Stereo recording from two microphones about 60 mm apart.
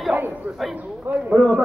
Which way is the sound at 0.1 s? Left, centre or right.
Right.